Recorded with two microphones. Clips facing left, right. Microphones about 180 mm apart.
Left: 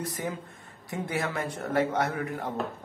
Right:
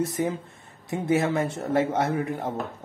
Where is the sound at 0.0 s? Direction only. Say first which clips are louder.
Right 7 dB; 25° right (ahead or behind).